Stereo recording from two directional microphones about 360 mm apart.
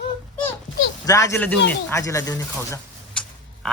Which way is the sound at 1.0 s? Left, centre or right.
Centre.